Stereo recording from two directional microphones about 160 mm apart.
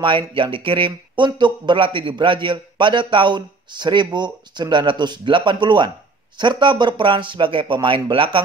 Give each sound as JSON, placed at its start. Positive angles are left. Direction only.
{"t": 0.0, "sound": "speech", "side_deg": -30}